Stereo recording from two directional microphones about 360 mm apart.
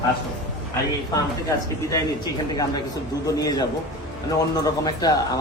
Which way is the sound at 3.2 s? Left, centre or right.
Centre.